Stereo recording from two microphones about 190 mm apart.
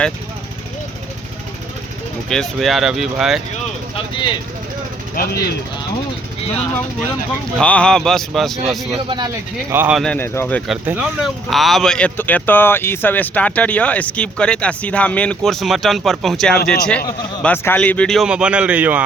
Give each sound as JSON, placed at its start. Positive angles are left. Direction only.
{"t": 2.3, "sound": "speech", "side_deg": 0}
{"t": 5.1, "sound": "speech", "side_deg": 55}
{"t": 7.6, "sound": "speech", "side_deg": 5}
{"t": 9.0, "sound": "speech", "side_deg": -20}
{"t": 9.7, "sound": "speech", "side_deg": -10}
{"t": 10.0, "sound": "speech", "side_deg": 10}
{"t": 10.8, "sound": "speech", "side_deg": -5}